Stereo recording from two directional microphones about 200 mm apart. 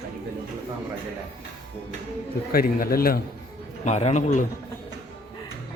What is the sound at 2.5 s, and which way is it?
Speech, 50° left (ahead or behind).